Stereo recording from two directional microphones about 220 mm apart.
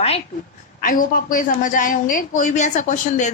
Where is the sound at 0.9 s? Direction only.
40° left (ahead or behind).